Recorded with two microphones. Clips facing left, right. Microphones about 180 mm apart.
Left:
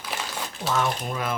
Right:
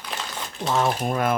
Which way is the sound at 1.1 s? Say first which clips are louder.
Right 6 dB; 50° right (ahead or behind).